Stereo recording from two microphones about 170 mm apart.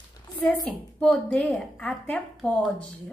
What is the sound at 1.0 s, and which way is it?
A woman's voice, centre (ahead or behind).